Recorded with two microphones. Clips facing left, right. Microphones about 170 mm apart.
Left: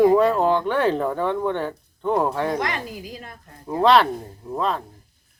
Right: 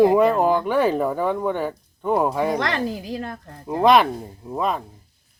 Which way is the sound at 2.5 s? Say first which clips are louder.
Right 3 dB; 75° right (ahead or behind).